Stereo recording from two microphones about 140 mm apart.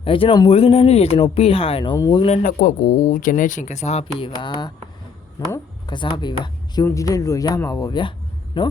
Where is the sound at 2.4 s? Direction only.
75° left (ahead or behind); by 4.7 s 35° left (ahead or behind).